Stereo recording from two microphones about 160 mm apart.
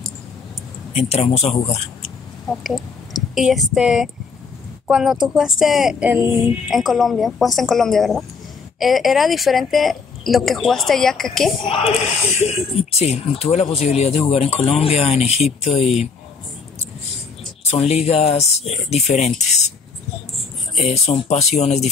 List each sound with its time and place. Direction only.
0.9 s speech: 40° left (ahead or behind)
3.3 s a woman's voice: centre (ahead or behind)
11.6 s speech: 35° left (ahead or behind)
15.8 s a woman's voice: centre (ahead or behind)
17.6 s speech: 40° left (ahead or behind)
20.8 s speech: 40° left (ahead or behind)